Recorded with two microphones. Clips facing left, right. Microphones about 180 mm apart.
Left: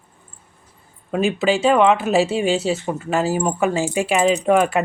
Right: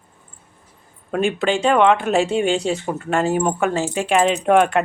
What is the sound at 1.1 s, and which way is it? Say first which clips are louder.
Speech: left 1 dB; 5° left (ahead or behind).